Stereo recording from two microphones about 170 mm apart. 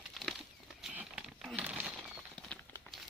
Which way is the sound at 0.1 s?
Centre (ahead or behind).